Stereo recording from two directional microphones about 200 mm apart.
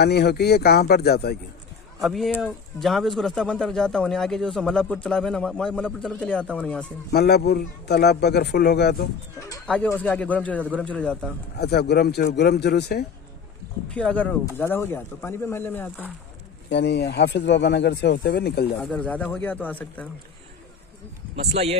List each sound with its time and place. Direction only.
0.0 s a man's voice: 55° left (ahead or behind)
2.0 s speech: centre (ahead or behind)
7.1 s a man's voice: 50° left (ahead or behind)
9.7 s speech: 5° left (ahead or behind)
11.5 s speech: 55° left (ahead or behind)
13.8 s speech: 5° left (ahead or behind)
16.6 s speech: 60° left (ahead or behind)
18.8 s speech: 5° left (ahead or behind)
21.4 s speech: 30° right (ahead or behind)